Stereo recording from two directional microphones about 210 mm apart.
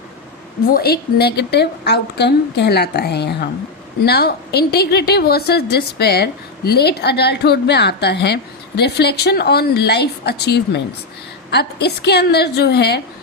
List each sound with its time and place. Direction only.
0.7 s a woman's voice: 50° left (ahead or behind)